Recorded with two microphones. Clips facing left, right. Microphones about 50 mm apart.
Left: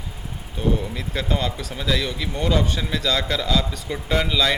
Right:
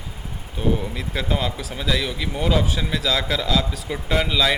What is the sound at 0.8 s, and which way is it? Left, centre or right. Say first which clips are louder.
Speech: even; centre.